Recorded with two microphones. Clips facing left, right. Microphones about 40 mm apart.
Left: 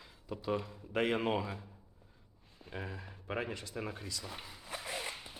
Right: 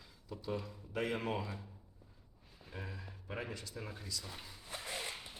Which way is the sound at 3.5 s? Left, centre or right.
Left.